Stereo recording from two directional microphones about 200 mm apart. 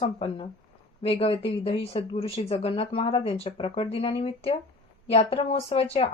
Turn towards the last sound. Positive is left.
turn(degrees=30)  # may be behind; listen again after turning